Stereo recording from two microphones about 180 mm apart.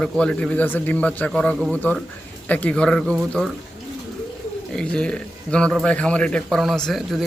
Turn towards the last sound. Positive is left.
turn(degrees=0)  # may be behind; listen again after turning